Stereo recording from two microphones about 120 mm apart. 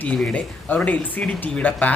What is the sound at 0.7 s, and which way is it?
Speech, 15° left (ahead or behind).